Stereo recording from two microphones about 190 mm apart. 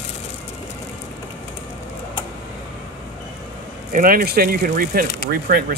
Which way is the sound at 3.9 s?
50° right (ahead or behind).